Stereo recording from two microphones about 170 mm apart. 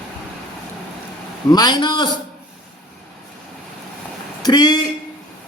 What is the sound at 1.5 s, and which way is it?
Speech, 25° left (ahead or behind).